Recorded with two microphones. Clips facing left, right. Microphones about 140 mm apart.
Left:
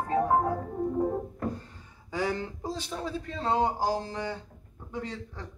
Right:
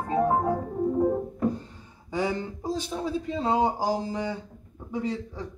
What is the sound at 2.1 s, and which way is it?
A man's voice, 15° right (ahead or behind).